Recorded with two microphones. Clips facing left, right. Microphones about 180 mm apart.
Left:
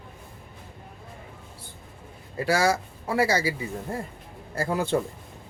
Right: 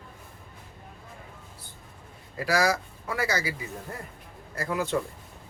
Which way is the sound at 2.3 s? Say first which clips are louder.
Left 2 dB; 30° left (ahead or behind).